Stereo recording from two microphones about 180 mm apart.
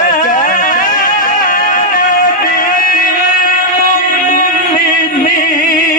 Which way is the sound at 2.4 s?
50° left (ahead or behind).